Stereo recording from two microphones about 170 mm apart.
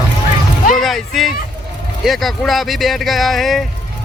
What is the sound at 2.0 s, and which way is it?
Speech, centre (ahead or behind).